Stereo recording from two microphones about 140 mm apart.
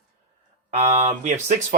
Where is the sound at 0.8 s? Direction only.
50° right (ahead or behind).